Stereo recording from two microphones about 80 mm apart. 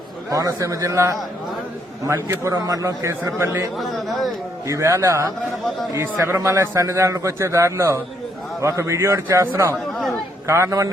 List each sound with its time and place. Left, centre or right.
0.3 s a man's voice: right
2.5 s a man's voice: right
3.8 s speech: centre
4.7 s a man's voice: right